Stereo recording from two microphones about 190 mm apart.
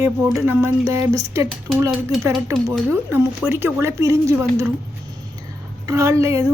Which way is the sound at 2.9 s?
10° right (ahead or behind).